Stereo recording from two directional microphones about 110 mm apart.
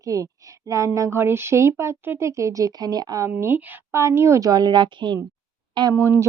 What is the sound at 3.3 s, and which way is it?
A woman's voice, 20° right (ahead or behind).